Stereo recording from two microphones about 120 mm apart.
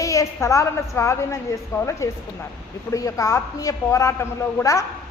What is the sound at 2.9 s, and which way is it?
A man's voice, 25° left (ahead or behind).